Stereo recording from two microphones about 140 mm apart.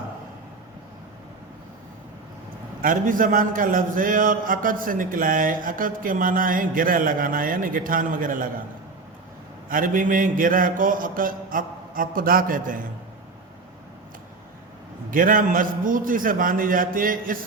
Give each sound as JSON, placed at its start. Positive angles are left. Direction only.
{"t": 2.8, "sound": "a man's voice", "side_deg": -75}
{"t": 9.6, "sound": "a man's voice", "side_deg": -80}
{"t": 15.1, "sound": "a man's voice", "side_deg": -85}